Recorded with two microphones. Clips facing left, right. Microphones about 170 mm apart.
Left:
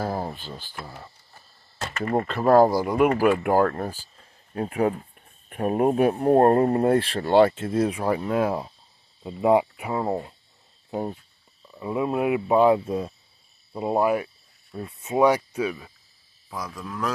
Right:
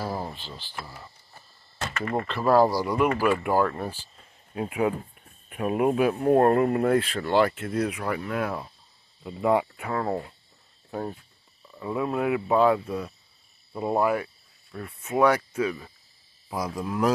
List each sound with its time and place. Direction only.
0.0 s speech: 45° left (ahead or behind)
2.2 s speech: 45° left (ahead or behind); by 15.9 s 10° left (ahead or behind)
16.4 s speech: 25° right (ahead or behind)